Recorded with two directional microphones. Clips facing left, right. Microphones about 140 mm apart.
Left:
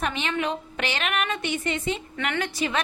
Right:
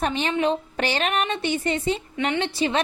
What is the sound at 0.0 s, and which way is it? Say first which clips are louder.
A woman's voice: right 4 dB; 35° right (ahead or behind).